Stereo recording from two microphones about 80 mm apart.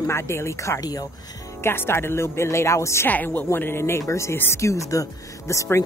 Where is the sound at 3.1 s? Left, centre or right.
Left.